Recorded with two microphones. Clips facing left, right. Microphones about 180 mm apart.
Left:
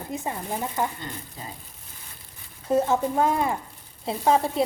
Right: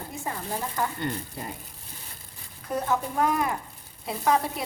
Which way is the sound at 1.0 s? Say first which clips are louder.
Right 6 dB; 65° right (ahead or behind).